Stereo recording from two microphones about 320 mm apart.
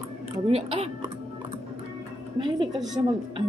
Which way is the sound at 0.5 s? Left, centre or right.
Centre.